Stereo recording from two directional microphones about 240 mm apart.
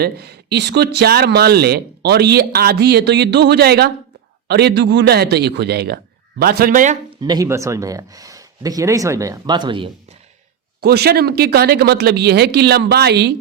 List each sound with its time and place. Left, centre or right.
0.0 s a man's voice: right
7.2 s speech: centre
10.8 s speech: right